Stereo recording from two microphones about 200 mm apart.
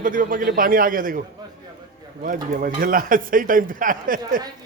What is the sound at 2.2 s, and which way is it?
Speech, 45° right (ahead or behind).